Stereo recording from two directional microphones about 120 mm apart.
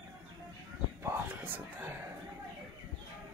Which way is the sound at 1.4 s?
15° right (ahead or behind).